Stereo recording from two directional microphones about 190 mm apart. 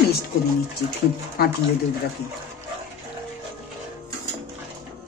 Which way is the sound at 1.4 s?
55° left (ahead or behind).